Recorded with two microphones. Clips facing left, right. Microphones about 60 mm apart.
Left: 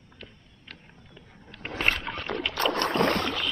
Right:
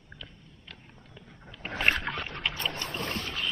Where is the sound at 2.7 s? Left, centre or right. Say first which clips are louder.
Left 10 dB; left.